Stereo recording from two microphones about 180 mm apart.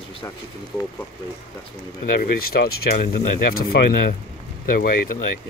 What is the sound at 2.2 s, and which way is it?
Speech, 55° left (ahead or behind).